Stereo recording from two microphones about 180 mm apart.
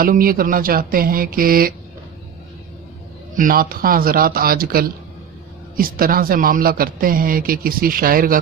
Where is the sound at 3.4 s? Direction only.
50° right (ahead or behind).